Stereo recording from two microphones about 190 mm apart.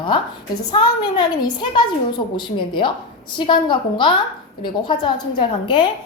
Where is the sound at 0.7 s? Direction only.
25° left (ahead or behind).